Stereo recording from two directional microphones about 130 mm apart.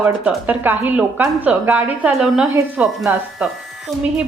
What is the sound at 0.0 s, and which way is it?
Speech, 15° right (ahead or behind).